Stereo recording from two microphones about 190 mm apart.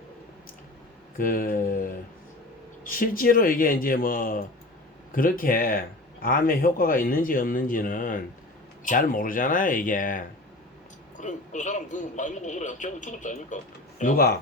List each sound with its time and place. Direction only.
1.2 s a man's voice: 45° left (ahead or behind)